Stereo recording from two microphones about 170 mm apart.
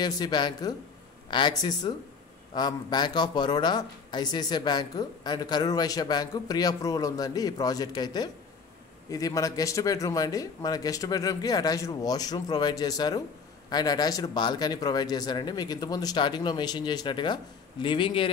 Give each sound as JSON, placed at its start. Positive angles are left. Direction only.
{"t": 0.0, "sound": "speech", "side_deg": 25}